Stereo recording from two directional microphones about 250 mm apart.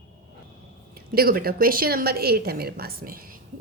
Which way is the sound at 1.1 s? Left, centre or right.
Right.